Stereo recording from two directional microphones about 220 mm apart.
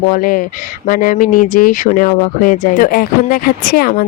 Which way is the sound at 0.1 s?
40° left (ahead or behind).